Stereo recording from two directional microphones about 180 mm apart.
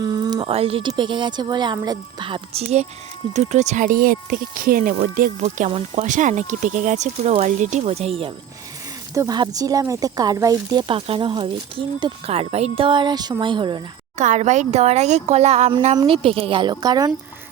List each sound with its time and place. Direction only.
0.0 s speech: 20° right (ahead or behind)
9.1 s speech: 20° right (ahead or behind)
14.2 s speech: 40° right (ahead or behind); by 17.1 s 25° right (ahead or behind)